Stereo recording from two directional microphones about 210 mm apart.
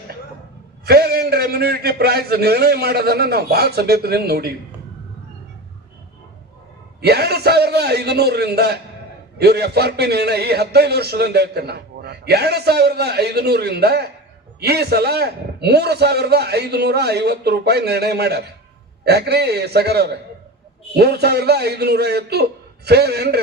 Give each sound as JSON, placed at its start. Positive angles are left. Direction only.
{"t": 0.9, "sound": "a man's voice", "side_deg": -45}
{"t": 7.0, "sound": "a man's voice", "side_deg": -50}